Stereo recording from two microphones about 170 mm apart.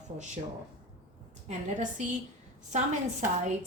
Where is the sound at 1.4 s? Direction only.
45° right (ahead or behind).